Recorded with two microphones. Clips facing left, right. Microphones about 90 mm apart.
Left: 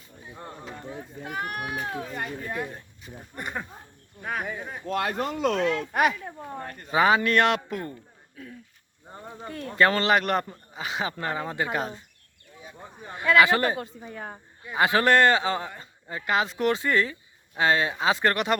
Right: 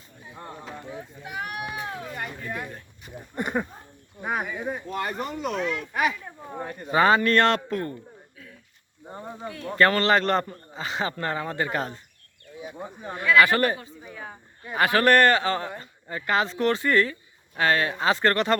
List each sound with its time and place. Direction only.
1.5 s speech: 45° left (ahead or behind)
2.5 s speech: 20° left (ahead or behind)
3.3 s speech: 15° right (ahead or behind)
4.9 s speech: 90° left
6.6 s speech: 10° right (ahead or behind)
6.9 s a man's voice: 5° left (ahead or behind)
9.0 s speech: 15° right (ahead or behind)
9.7 s a man's voice: 15° left (ahead or behind)
13.3 s speech: 20° left (ahead or behind)
14.1 s speech: 45° left (ahead or behind)
14.8 s a man's voice: 20° left (ahead or behind)